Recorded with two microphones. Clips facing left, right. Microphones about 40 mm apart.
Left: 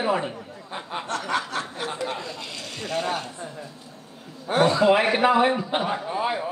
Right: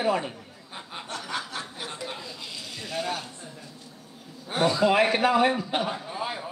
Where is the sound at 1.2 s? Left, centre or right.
Centre.